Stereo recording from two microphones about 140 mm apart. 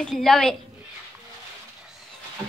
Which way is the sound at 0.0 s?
5° left (ahead or behind).